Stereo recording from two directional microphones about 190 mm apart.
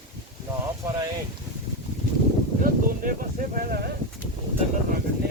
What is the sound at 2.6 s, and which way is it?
Speech, 50° right (ahead or behind).